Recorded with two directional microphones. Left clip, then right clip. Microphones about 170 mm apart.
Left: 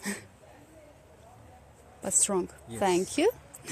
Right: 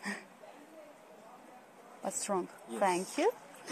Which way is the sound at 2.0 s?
90° left.